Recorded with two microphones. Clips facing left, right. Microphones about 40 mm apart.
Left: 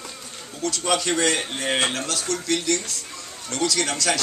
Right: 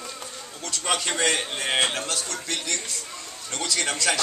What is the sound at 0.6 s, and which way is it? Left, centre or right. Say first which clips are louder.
Speech: left 4 dB; centre.